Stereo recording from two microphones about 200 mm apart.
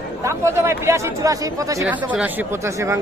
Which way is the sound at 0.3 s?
15° right (ahead or behind).